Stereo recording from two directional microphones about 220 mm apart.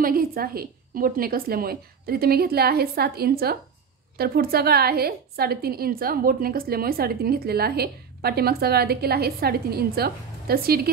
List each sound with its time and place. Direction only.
0.0 s a woman's voice: 40° right (ahead or behind)